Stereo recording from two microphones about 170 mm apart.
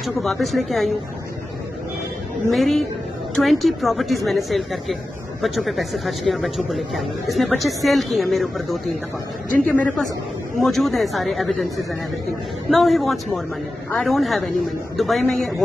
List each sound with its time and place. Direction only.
0.0 s a man's voice: centre (ahead or behind)
2.5 s a man's voice: centre (ahead or behind)